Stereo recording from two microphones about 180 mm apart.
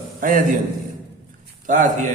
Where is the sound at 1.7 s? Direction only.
45° right (ahead or behind).